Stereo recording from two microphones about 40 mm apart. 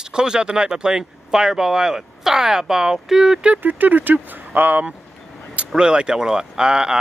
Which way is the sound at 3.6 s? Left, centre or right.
Right.